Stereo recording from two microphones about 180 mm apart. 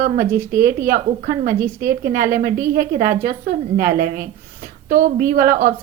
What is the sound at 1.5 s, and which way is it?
Speech, 15° right (ahead or behind).